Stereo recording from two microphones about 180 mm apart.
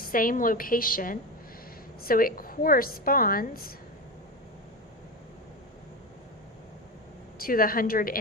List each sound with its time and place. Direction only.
0.0 s a woman's voice: 50° left (ahead or behind)
7.3 s a woman's voice: 55° left (ahead or behind)